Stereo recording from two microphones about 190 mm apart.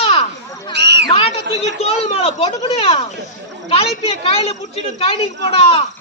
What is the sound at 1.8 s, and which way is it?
A woman's voice, 35° left (ahead or behind).